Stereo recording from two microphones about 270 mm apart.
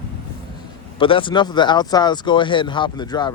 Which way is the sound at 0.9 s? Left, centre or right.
Centre.